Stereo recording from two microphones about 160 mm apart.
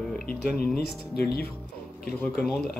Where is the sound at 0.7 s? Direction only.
75° left (ahead or behind).